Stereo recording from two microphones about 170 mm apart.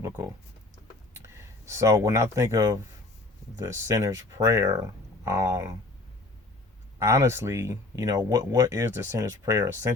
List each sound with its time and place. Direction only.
1.1 s speech: 15° right (ahead or behind)
7.0 s speech: 15° right (ahead or behind)